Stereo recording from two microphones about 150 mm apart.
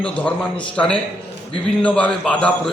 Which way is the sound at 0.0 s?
5° left (ahead or behind).